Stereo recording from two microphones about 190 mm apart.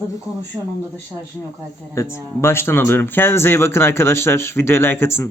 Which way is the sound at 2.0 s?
15° left (ahead or behind).